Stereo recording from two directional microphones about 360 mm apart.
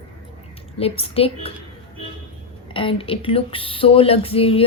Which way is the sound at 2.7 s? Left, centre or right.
Centre.